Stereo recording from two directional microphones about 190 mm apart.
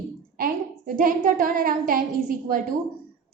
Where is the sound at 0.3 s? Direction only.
45° right (ahead or behind).